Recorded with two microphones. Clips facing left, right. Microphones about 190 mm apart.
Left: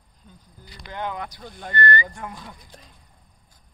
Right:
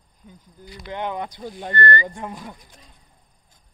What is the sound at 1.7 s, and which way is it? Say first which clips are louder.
Speech: right 1 dB; 15° left (ahead or behind).